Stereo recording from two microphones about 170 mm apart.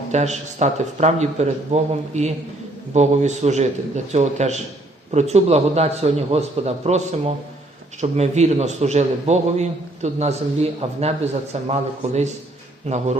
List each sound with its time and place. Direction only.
0.1 s a man's voice: 40° right (ahead or behind)